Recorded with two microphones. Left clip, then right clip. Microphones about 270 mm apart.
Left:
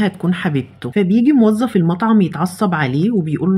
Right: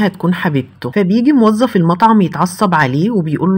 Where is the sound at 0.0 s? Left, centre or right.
Centre.